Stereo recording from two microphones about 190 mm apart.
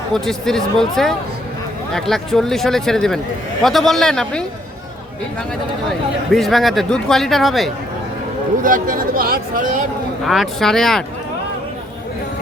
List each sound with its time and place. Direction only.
0.1 s speech: centre (ahead or behind)
6.3 s speech: centre (ahead or behind)
8.6 s speech: 45° right (ahead or behind)
10.2 s speech: centre (ahead or behind)